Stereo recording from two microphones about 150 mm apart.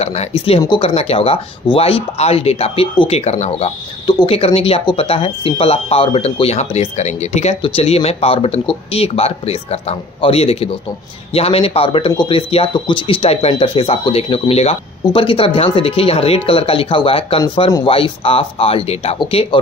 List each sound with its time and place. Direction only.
0.0 s speech: 45° left (ahead or behind)
4.1 s speech: 30° left (ahead or behind)
4.6 s speech: 40° left (ahead or behind)